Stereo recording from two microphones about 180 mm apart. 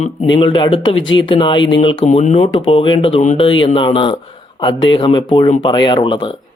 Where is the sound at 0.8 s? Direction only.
90° left.